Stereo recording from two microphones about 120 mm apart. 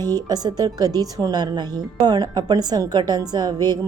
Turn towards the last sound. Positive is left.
turn(degrees=-35)  # may be behind; listen again after turning